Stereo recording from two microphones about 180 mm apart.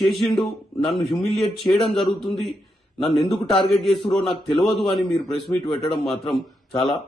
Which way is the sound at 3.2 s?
25° left (ahead or behind).